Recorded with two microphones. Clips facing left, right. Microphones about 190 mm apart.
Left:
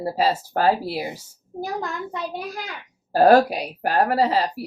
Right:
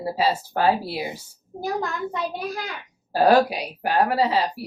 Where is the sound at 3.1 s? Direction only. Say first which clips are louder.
Left 2 dB; 45° left (ahead or behind).